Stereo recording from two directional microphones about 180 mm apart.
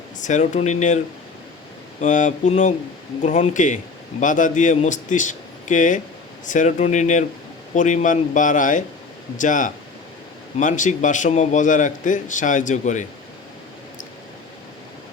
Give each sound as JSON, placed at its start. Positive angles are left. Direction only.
{"t": 0.2, "sound": "speech", "side_deg": 40}
{"t": 2.0, "sound": "a man's voice", "side_deg": 45}